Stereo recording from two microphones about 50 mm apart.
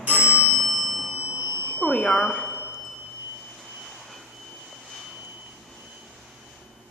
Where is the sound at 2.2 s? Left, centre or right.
Left.